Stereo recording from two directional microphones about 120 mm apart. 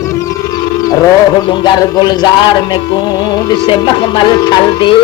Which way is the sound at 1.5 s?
40° left (ahead or behind).